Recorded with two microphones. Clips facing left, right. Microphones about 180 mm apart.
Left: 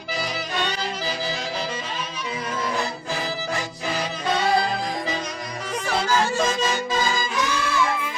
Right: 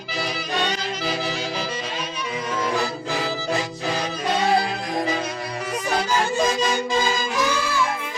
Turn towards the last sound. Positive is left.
turn(degrees=-15)  # may be behind; listen again after turning